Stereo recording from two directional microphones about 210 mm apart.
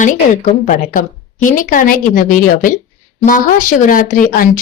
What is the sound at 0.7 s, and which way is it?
Speech, 40° left (ahead or behind).